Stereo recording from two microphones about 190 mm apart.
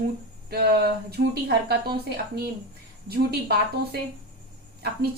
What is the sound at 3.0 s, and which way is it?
Speech, 55° right (ahead or behind).